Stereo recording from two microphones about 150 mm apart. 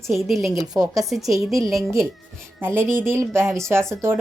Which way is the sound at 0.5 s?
25° right (ahead or behind).